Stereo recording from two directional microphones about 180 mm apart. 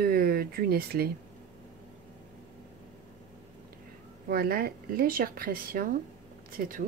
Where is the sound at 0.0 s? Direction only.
55° right (ahead or behind).